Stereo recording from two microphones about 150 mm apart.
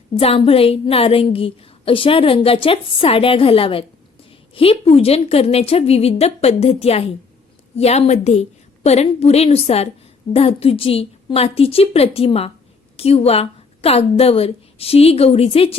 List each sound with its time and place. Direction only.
0.1 s a woman's voice: 40° left (ahead or behind)